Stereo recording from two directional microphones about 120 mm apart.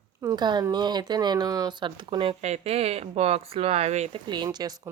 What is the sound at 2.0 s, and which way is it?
Speech, 45° right (ahead or behind).